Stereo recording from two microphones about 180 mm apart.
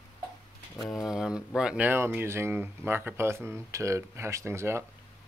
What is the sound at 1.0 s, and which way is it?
Speech, 5° right (ahead or behind).